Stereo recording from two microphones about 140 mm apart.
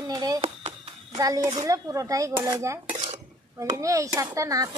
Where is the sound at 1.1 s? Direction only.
25° right (ahead or behind).